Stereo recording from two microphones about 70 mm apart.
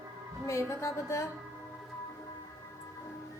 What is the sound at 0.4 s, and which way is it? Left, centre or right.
Speech, left.